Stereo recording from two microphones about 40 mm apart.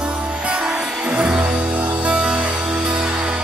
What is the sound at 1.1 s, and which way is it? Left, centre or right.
Music, right.